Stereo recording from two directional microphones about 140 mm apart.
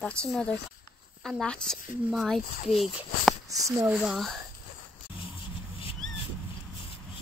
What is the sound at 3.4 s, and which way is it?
Speech, 25° right (ahead or behind).